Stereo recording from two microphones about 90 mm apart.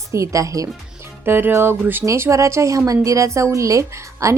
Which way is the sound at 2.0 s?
30° right (ahead or behind).